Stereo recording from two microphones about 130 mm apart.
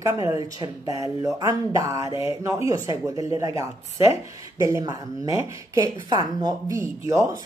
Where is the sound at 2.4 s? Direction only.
25° right (ahead or behind).